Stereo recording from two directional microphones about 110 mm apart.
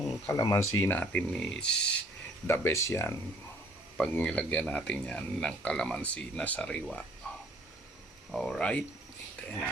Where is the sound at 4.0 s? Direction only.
10° left (ahead or behind).